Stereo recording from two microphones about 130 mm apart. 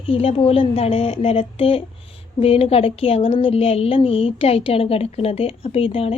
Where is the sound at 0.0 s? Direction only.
45° left (ahead or behind).